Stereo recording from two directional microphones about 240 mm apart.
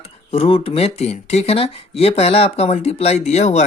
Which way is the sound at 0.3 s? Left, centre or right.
Left.